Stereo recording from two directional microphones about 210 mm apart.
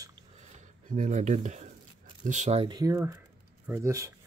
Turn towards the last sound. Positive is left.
turn(degrees=-15)  # may be behind; listen again after turning